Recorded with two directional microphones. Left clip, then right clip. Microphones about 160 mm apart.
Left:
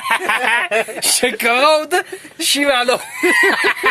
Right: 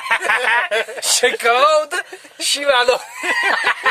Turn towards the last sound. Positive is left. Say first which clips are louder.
# left 2 dB
turn(degrees=5)  # may be behind; listen again after turning